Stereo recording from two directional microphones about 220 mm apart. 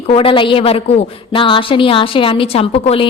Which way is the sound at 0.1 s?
25° left (ahead or behind).